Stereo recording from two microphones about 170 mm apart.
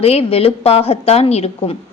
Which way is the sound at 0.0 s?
35° left (ahead or behind).